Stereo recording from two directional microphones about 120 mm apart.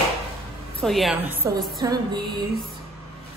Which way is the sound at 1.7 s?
35° right (ahead or behind).